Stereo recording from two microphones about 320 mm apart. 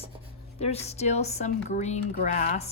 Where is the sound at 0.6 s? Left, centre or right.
Centre.